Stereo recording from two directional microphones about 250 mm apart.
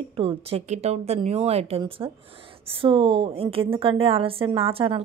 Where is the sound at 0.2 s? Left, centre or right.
Right.